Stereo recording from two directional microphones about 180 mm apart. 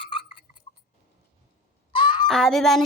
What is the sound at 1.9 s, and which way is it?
Fowl, 25° left (ahead or behind).